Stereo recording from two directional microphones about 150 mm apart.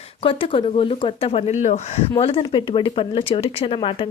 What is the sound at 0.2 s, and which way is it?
Speech, 35° left (ahead or behind).